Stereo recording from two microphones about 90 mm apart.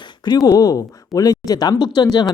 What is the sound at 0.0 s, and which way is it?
Speech, 50° left (ahead or behind).